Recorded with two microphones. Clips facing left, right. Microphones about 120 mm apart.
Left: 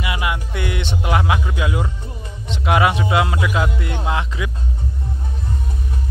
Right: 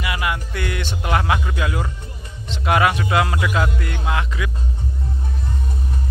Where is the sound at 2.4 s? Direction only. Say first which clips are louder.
Left 1 dB; 15° left (ahead or behind).